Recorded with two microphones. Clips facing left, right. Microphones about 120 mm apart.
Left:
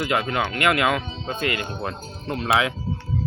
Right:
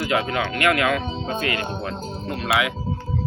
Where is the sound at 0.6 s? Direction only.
20° left (ahead or behind).